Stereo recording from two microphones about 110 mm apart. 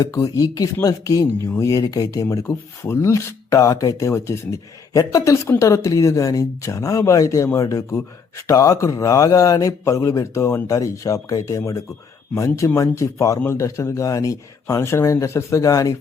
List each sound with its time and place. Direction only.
0.0 s speech: 35° left (ahead or behind)